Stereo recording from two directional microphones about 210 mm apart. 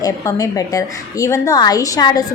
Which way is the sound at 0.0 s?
15° left (ahead or behind).